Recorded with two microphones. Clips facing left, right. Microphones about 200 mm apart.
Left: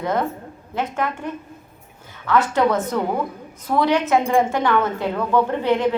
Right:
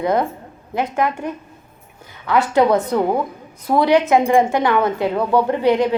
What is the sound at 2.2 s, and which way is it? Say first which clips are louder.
A woman's voice: right 3 dB; 15° right (ahead or behind).